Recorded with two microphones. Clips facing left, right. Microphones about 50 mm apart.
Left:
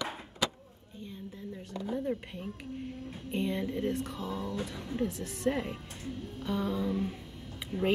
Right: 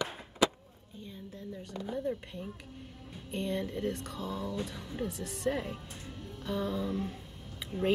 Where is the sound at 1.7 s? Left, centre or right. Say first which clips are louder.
Left 2 dB; centre.